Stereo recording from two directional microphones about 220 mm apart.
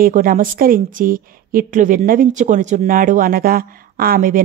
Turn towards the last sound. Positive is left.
turn(degrees=-40)  # may be behind; listen again after turning